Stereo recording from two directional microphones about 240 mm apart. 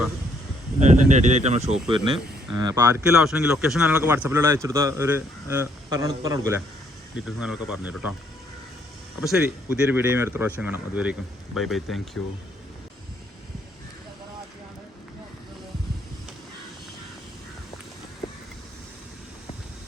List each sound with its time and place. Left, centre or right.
0.8 s a man's voice: right; by 3.0 s centre
3.2 s a man's voice: centre
7.3 s speech: centre
9.2 s a man's voice: centre